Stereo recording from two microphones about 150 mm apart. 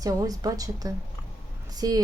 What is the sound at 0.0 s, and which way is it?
A woman's voice, 25° right (ahead or behind).